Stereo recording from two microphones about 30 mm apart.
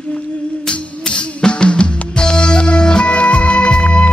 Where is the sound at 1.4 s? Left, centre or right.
Left.